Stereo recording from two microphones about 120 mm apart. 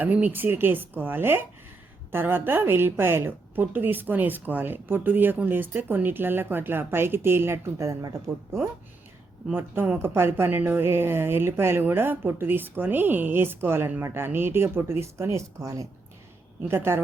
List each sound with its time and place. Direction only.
0.0 s a woman's voice: 15° right (ahead or behind)
9.5 s speech: 15° right (ahead or behind)